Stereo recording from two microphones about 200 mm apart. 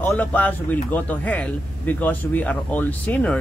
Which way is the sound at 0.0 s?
5° left (ahead or behind).